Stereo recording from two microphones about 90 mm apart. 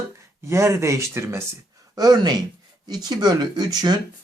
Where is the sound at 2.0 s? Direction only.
50° right (ahead or behind).